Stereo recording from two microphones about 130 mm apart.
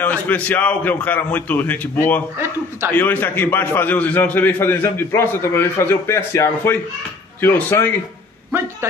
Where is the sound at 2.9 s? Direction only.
15° left (ahead or behind).